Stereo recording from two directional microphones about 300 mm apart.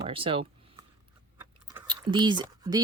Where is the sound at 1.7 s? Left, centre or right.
Centre.